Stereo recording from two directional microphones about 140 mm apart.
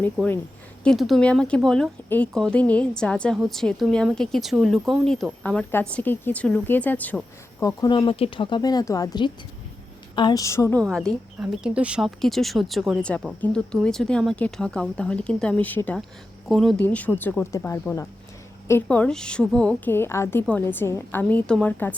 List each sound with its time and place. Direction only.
0.9 s a woman's voice: centre (ahead or behind)
7.8 s a woman's voice: 35° left (ahead or behind)
10.8 s speech: 5° left (ahead or behind)
11.3 s a woman's voice: 10° right (ahead or behind); by 16.0 s 15° left (ahead or behind)
16.5 s speech: centre (ahead or behind)
16.8 s a woman's voice: 10° left (ahead or behind)